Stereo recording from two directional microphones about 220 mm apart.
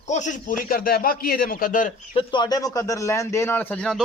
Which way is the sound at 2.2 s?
20° left (ahead or behind).